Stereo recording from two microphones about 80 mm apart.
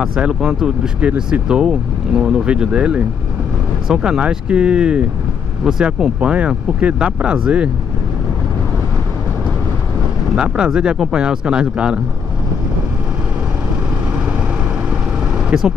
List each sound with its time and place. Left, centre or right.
0.0 s speech: centre
10.3 s speech: centre
15.5 s speech: centre